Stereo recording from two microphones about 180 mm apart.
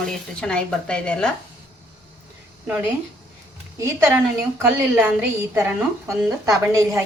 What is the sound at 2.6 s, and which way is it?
A woman's voice, 10° right (ahead or behind).